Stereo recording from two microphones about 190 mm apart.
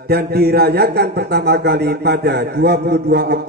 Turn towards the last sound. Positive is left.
turn(degrees=-55)  # may be behind; listen again after turning